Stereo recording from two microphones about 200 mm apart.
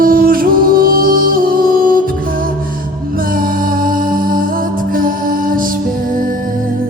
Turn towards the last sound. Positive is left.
turn(degrees=-45)  # may be behind; listen again after turning